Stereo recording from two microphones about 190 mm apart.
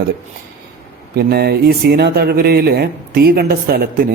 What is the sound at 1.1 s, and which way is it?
Speech, 55° right (ahead or behind).